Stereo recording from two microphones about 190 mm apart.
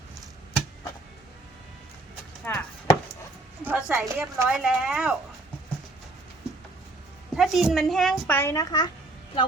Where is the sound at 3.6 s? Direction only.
10° right (ahead or behind).